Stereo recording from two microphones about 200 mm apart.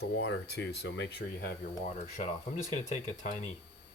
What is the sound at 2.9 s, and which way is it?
Speech, 35° left (ahead or behind).